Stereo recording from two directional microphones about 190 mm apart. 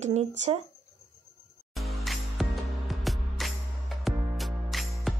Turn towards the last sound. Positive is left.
turn(degrees=0)  # may be behind; listen again after turning